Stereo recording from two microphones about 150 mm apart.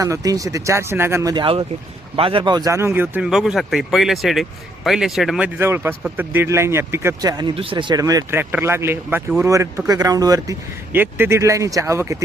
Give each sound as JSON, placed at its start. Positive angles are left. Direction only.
{"t": 0.0, "sound": "speech", "side_deg": -20}
{"t": 5.5, "sound": "speech", "side_deg": -15}
{"t": 10.9, "sound": "speech", "side_deg": -15}